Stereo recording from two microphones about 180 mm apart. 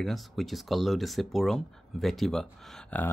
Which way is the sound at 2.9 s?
10° left (ahead or behind).